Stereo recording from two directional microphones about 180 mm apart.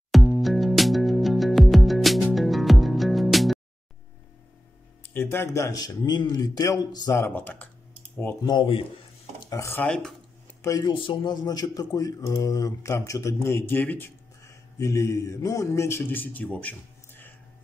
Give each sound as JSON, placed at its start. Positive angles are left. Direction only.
{"t": 0.1, "sound": "music", "side_deg": 0}
{"t": 5.1, "sound": "speech", "side_deg": 15}
{"t": 8.5, "sound": "a man's voice", "side_deg": 25}
{"t": 9.5, "sound": "speech", "side_deg": 15}
{"t": 10.6, "sound": "speech", "side_deg": 20}